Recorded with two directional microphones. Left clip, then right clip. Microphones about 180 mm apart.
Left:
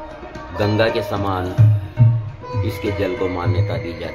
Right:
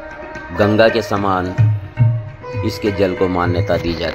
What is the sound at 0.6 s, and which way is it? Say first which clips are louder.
Speech: right 5 dB; 35° right (ahead or behind).